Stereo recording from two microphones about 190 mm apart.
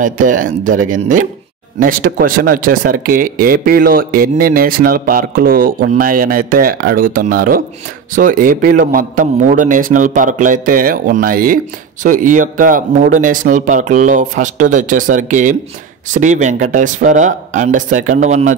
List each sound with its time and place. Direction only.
0.0 s a man's voice: 45° right (ahead or behind)